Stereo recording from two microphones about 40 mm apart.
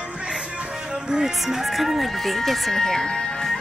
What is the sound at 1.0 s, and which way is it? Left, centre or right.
Music, centre.